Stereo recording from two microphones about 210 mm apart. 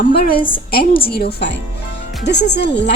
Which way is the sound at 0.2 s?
45° left (ahead or behind).